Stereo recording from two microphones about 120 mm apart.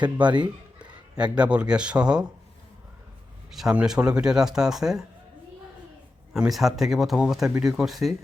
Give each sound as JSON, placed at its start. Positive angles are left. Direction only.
{"t": 0.3, "sound": "a sound", "side_deg": -40}
{"t": 1.1, "sound": "speech", "side_deg": -10}
{"t": 3.5, "sound": "speech", "side_deg": -5}
{"t": 6.3, "sound": "speech", "side_deg": -5}